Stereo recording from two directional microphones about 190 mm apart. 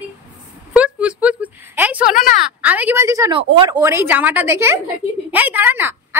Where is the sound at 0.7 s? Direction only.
5° right (ahead or behind).